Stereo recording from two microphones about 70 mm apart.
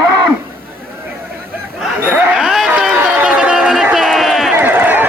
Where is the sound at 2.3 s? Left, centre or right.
Centre.